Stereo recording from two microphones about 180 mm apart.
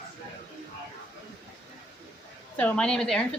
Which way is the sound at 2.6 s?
5° left (ahead or behind).